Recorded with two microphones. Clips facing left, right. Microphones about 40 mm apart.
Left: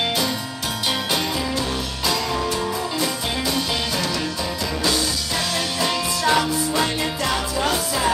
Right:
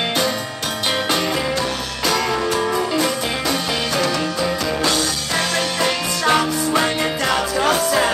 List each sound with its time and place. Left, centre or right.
2.0 s music: right
5.8 s music: right
7.6 s music: right